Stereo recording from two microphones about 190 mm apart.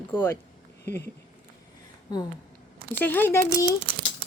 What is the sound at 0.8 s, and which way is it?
Speech, 60° left (ahead or behind).